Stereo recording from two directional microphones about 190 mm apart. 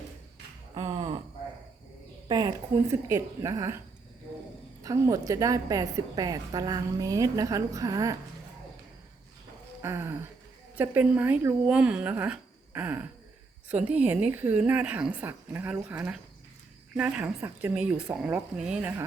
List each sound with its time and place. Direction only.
0.7 s a sound: 25° right (ahead or behind)
2.2 s a woman's voice: 20° right (ahead or behind)
4.8 s a woman's voice: 20° right (ahead or behind)
9.8 s a woman's voice: 15° right (ahead or behind)